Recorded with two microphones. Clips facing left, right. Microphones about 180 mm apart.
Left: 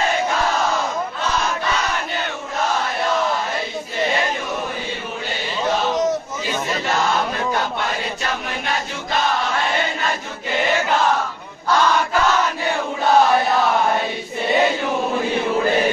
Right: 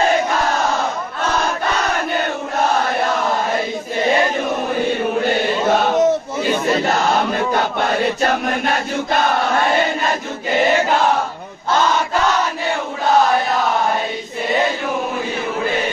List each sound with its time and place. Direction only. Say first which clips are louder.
5.2 s chant: right 7 dB; 55° right (ahead or behind)
8.2 s chant: right 8 dB; 55° right (ahead or behind)